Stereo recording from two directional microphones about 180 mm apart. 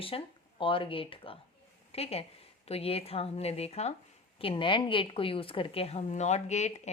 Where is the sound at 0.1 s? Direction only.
30° left (ahead or behind).